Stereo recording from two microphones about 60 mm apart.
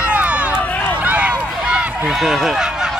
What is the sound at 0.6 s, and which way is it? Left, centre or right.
Run, left.